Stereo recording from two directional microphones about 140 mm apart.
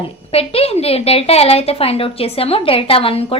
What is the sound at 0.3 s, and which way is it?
A woman's voice, 45° left (ahead or behind).